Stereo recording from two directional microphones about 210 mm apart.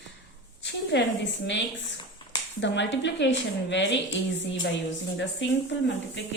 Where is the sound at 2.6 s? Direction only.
60° left (ahead or behind).